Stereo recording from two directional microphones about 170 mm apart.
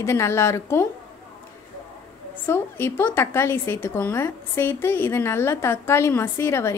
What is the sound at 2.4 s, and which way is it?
A woman's voice, 15° left (ahead or behind).